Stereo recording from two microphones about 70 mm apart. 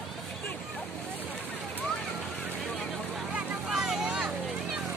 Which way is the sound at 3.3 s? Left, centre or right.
Centre.